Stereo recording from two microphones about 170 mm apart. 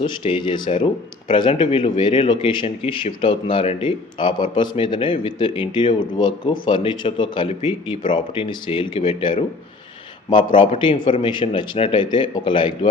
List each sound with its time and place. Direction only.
0.0 s a man's voice: 30° left (ahead or behind)